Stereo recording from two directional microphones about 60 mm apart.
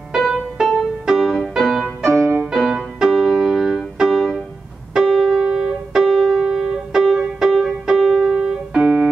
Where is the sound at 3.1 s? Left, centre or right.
Centre.